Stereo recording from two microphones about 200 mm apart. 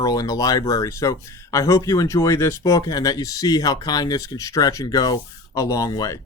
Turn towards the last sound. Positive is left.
turn(degrees=15)  # may be behind; listen again after turning